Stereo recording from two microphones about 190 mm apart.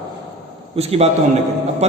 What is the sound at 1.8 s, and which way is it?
Mantra, 35° right (ahead or behind).